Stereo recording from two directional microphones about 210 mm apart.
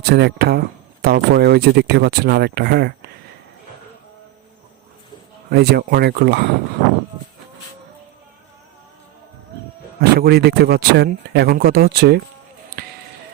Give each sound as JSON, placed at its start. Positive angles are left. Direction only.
{"t": 0.1, "sound": "speech", "side_deg": -50}
{"t": 5.5, "sound": "speech", "side_deg": -50}
{"t": 10.0, "sound": "speech", "side_deg": -50}